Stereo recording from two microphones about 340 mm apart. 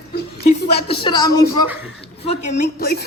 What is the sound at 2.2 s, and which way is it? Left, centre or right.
Speech, left.